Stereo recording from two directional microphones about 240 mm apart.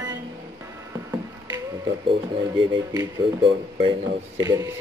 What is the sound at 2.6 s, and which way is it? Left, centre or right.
Speech, centre.